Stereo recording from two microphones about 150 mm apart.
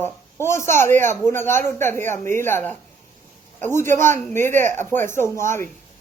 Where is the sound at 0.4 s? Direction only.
15° left (ahead or behind).